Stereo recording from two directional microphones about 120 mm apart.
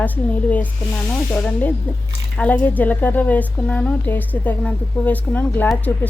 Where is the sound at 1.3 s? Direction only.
15° left (ahead or behind).